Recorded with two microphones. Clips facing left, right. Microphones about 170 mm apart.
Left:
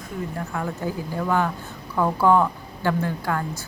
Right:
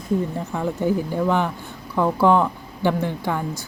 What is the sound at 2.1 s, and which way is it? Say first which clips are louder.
Speech: right 1 dB; 15° right (ahead or behind).